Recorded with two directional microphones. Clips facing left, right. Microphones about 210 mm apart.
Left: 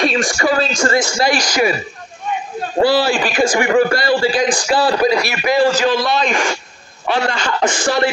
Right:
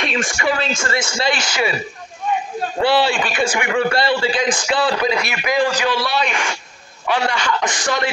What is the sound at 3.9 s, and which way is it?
Speech, 25° right (ahead or behind).